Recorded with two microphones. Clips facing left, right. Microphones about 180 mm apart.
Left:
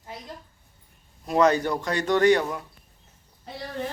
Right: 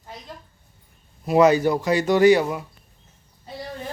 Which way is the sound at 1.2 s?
5° right (ahead or behind).